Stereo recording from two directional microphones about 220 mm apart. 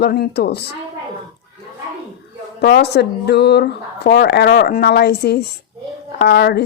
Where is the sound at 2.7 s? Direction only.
50° left (ahead or behind).